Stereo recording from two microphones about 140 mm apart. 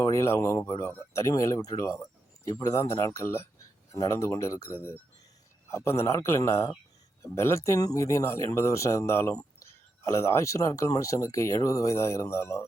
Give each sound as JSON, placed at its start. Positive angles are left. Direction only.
{"t": 0.0, "sound": "speech", "side_deg": 20}